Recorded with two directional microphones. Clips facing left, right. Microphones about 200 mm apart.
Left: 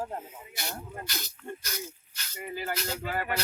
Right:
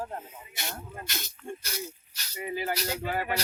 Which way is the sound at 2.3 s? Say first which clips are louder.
Right 3 dB; 10° right (ahead or behind).